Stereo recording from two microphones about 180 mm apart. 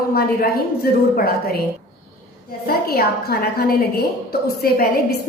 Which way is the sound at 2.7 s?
60° left (ahead or behind).